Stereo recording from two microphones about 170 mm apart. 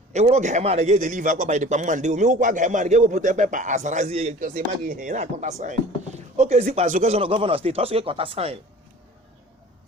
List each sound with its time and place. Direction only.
0.1 s a man's voice: 40° right (ahead or behind)
4.4 s a man's voice: 55° right (ahead or behind)
7.2 s speech: 30° right (ahead or behind)